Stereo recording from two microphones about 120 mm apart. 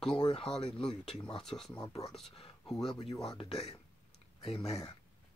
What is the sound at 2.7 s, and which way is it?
Speech, 5° left (ahead or behind).